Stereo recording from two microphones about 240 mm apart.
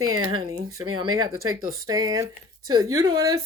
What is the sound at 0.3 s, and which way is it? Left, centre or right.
Speech, right.